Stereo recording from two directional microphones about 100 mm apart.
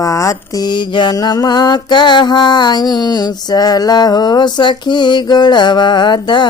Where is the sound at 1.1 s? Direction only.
40° left (ahead or behind).